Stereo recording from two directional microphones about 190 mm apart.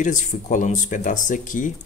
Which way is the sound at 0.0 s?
40° left (ahead or behind).